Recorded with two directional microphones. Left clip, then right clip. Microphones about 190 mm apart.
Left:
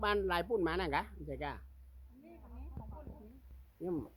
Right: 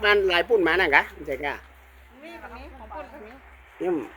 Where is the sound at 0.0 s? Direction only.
10° left (ahead or behind).